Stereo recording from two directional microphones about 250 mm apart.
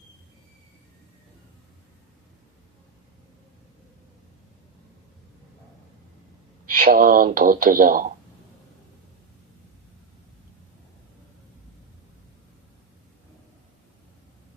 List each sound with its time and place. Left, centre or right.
6.7 s speech: right